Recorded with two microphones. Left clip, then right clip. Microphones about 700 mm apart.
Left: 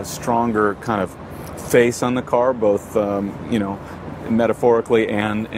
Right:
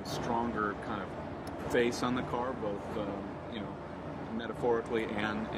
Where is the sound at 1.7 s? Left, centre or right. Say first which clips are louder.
Left 15 dB; left.